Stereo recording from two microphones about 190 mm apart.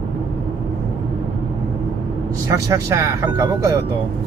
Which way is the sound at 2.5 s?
15° right (ahead or behind).